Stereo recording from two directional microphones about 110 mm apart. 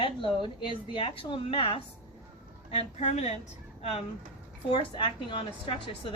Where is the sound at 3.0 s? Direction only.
85° left.